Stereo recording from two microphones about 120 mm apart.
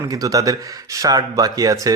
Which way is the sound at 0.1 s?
30° right (ahead or behind).